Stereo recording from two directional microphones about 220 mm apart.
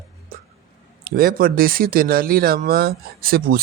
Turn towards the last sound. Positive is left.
turn(degrees=-40)  # may be behind; listen again after turning